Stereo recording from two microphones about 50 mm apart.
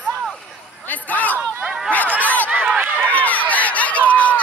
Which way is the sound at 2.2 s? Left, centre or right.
Left.